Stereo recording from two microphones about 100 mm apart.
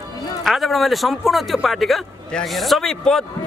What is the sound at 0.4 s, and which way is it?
A man's voice, centre (ahead or behind).